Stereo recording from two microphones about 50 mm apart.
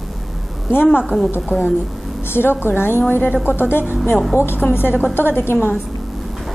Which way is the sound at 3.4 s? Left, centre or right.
Left.